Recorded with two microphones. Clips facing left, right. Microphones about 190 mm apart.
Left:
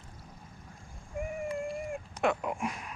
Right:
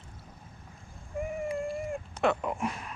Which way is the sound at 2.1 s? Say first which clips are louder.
Right 2 dB; 10° left (ahead or behind).